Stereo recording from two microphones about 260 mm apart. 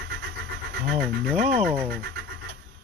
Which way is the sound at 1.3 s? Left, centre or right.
Centre.